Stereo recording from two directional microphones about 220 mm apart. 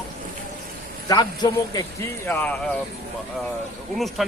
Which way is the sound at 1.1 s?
20° left (ahead or behind).